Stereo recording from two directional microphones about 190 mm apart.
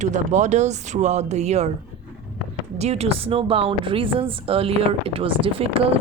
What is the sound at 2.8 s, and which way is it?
Speech, 35° right (ahead or behind).